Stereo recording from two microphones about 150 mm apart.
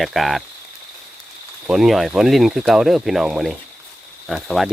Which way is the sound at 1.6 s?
Centre (ahead or behind).